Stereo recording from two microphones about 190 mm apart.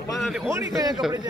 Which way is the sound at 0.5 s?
15° right (ahead or behind).